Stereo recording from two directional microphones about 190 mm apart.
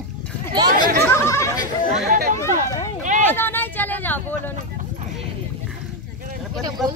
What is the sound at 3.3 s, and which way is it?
Speech, 10° left (ahead or behind).